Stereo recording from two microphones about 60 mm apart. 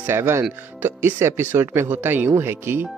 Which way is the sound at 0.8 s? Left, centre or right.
Right.